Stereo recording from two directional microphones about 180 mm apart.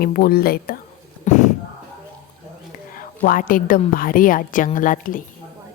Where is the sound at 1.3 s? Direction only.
40° left (ahead or behind).